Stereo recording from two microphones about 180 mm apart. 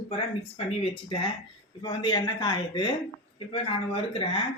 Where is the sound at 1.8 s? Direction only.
25° left (ahead or behind).